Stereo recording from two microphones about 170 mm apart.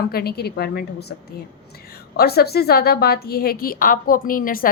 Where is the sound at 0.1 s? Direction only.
65° left (ahead or behind).